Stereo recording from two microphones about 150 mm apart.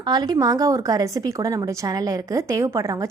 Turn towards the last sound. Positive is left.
turn(degrees=-20)  # may be behind; listen again after turning